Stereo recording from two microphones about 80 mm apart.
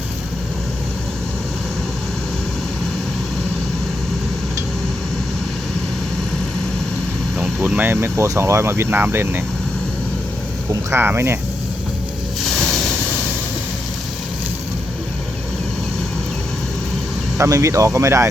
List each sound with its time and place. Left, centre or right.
7.6 s speech: centre
10.7 s speech: right
12.5 s a sound: centre
17.3 s speech: right